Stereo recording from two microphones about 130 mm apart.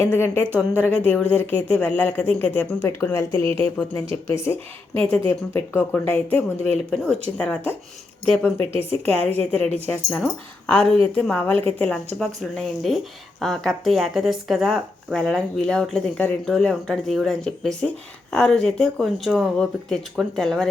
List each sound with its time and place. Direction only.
0.0 s speech: 15° left (ahead or behind)
0.5 s a woman's voice: 15° right (ahead or behind)
0.9 s speech: 10° left (ahead or behind)